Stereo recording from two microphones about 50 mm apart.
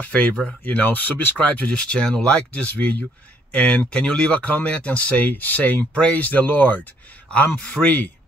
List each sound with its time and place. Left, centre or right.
0.0 s speech: left
1.7 s speech: centre; by 6.9 s left
7.2 s speech: left
7.8 s speech: left